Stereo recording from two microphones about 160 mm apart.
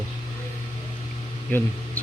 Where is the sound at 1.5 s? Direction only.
10° left (ahead or behind).